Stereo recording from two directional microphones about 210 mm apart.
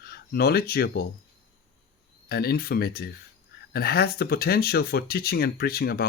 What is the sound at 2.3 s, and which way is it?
Speech, 45° left (ahead or behind).